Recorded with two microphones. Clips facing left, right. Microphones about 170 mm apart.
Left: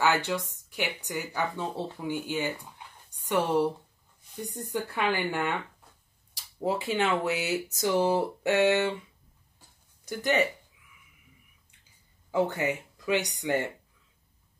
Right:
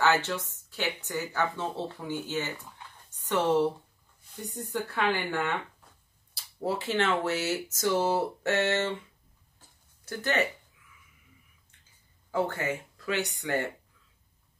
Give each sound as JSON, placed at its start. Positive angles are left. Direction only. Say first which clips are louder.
{"t": 0.0, "sound": "speech", "louder": "even", "side_deg": 15}
{"t": 2.8, "sound": "a sound", "louder": "even", "side_deg": 15}
{"t": 3.3, "sound": "speech", "louder": "even", "side_deg": 10}
{"t": 10.0, "sound": "speech", "louder": "left 2 dB", "side_deg": 15}
{"t": 12.3, "sound": "speech", "louder": "left 2 dB", "side_deg": 15}